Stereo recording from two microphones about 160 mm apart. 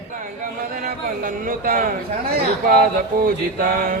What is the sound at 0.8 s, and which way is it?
Speech, 60° right (ahead or behind).